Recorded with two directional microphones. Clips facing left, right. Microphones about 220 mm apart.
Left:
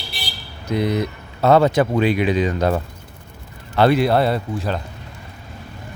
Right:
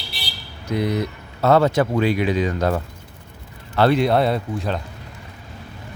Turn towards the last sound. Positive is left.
turn(degrees=0)  # may be behind; listen again after turning